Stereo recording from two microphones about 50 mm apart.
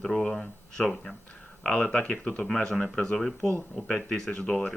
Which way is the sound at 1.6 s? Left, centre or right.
Centre.